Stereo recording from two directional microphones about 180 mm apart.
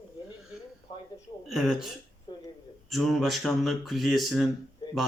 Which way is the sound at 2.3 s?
25° left (ahead or behind).